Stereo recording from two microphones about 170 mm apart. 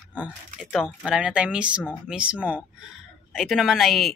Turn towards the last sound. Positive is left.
turn(degrees=0)  # may be behind; listen again after turning